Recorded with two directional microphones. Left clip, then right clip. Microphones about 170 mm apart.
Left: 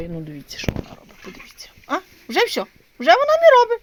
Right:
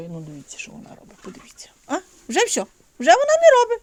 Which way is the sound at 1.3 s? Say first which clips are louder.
Left 4 dB; 25° right (ahead or behind).